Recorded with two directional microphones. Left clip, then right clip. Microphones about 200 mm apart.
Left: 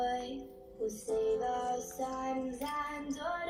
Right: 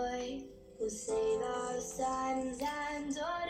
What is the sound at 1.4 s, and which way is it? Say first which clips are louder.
Music: left 3 dB; 25° right (ahead or behind).